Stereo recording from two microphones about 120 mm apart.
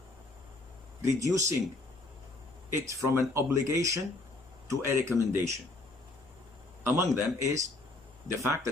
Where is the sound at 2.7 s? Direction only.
20° right (ahead or behind).